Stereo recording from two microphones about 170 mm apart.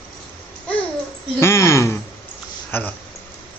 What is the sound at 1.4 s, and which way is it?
Speech, 15° left (ahead or behind).